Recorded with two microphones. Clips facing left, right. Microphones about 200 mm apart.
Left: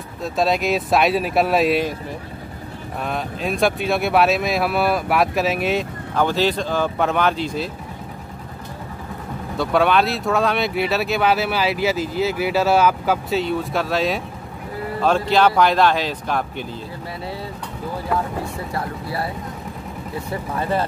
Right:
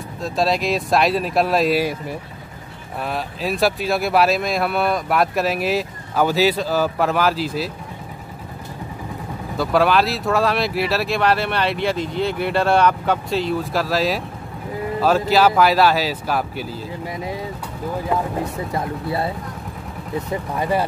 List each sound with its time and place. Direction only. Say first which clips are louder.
0.2 s speech: even; centre (ahead or behind)
9.6 s speech: even; centre (ahead or behind)
18.1 s speech: even; 20° right (ahead or behind)
20.2 s speech: right 2 dB; 15° right (ahead or behind)